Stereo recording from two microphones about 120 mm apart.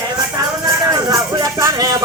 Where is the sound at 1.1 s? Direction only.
30° right (ahead or behind).